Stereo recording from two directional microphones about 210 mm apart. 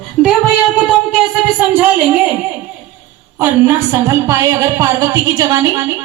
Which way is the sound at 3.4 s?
15° right (ahead or behind).